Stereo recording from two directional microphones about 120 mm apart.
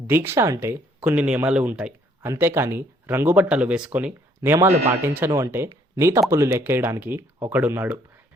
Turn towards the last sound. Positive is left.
turn(degrees=-15)  # may be behind; listen again after turning